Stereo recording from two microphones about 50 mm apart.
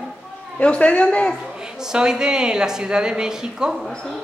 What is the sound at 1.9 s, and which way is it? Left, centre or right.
A woman's voice, centre.